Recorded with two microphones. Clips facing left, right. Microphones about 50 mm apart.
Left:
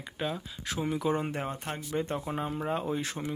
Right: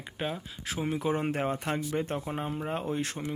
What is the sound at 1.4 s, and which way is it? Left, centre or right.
Speech, right.